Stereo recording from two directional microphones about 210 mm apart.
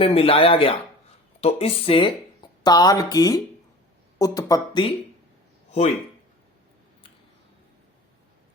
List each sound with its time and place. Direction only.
0.0 s speech: 25° left (ahead or behind)